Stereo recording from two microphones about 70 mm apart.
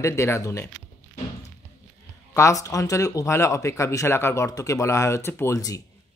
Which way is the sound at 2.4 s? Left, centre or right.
Left.